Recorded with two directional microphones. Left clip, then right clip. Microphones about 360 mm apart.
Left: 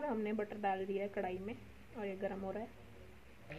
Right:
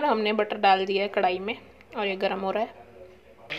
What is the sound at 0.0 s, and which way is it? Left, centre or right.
Speech, right.